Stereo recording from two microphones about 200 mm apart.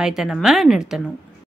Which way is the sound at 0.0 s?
5° right (ahead or behind).